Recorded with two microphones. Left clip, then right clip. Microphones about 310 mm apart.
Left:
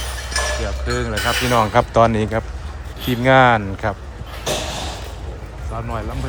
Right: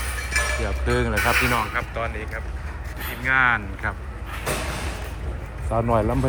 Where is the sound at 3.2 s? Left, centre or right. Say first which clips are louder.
Left 7 dB; centre.